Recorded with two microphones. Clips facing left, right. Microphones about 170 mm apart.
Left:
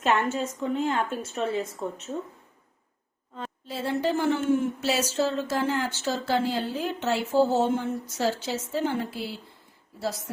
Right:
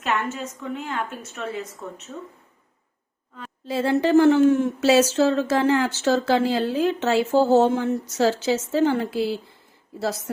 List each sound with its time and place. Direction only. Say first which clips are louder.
0.0 s a woman's voice: left 2 dB; 35° left (ahead or behind)
3.7 s speech: right 8 dB; 90° right